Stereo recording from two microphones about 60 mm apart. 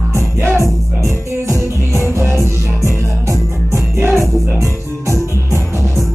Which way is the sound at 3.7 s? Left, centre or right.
Right.